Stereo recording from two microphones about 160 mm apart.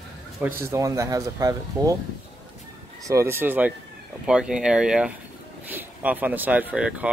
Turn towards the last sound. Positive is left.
turn(degrees=-5)  # may be behind; listen again after turning